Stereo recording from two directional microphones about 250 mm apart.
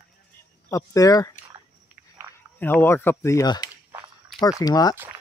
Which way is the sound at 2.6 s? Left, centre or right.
Centre.